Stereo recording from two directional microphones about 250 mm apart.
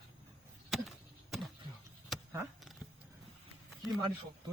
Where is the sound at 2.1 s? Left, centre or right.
Centre.